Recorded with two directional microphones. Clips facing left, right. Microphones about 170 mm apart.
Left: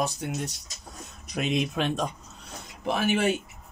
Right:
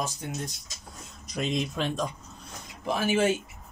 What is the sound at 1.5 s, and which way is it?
Speech, 65° left (ahead or behind).